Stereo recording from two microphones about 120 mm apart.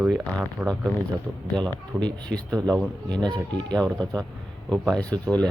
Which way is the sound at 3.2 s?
40° right (ahead or behind).